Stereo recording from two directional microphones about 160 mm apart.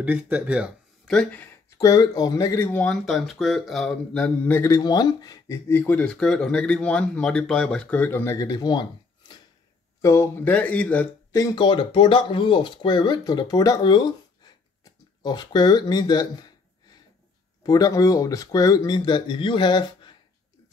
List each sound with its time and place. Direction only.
0.0 s speech: 10° right (ahead or behind)
1.0 s speech: 5° left (ahead or behind)
1.8 s speech: 20° left (ahead or behind)
3.1 s speech: centre (ahead or behind)
4.6 s speech: 20° left (ahead or behind)
10.0 s speech: 15° left (ahead or behind)
11.3 s speech: 25° left (ahead or behind)
17.6 s speech: 20° left (ahead or behind)